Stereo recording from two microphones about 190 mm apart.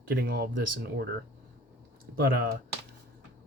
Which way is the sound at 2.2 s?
55° right (ahead or behind).